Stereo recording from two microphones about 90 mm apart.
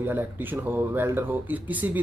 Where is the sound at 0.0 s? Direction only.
20° right (ahead or behind).